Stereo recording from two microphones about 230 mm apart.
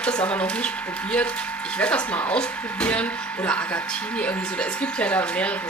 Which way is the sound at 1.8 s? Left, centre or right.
Centre.